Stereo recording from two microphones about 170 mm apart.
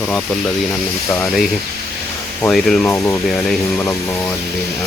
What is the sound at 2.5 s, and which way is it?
Speech, centre (ahead or behind).